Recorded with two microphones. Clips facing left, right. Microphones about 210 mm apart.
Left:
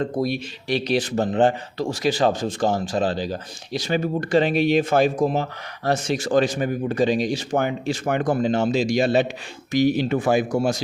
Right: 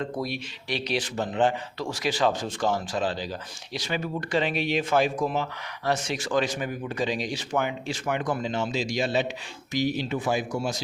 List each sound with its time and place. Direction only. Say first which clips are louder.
0.0 s speech: left 7 dB; 45° left (ahead or behind)